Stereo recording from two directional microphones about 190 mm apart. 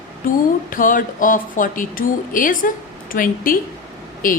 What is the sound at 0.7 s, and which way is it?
A woman's voice, 45° left (ahead or behind).